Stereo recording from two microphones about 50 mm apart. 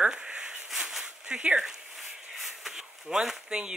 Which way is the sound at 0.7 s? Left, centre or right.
Centre.